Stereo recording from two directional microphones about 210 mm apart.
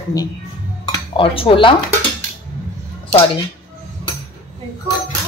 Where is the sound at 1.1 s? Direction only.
25° left (ahead or behind).